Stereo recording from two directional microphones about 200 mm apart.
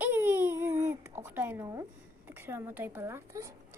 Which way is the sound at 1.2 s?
10° right (ahead or behind).